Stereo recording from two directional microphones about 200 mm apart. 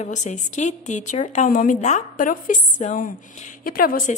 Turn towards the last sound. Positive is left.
turn(degrees=45)  # may be behind; listen again after turning